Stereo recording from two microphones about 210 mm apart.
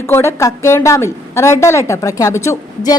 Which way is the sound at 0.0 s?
15° left (ahead or behind).